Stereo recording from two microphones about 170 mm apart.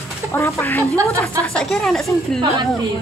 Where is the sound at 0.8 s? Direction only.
20° right (ahead or behind).